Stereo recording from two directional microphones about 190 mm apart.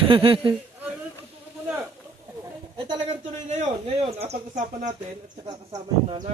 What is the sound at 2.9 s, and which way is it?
Speech, 35° right (ahead or behind).